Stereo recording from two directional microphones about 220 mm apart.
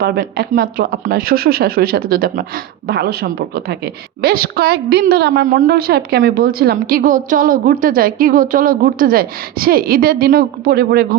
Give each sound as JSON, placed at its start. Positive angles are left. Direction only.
{"t": 0.0, "sound": "a woman's voice", "side_deg": -45}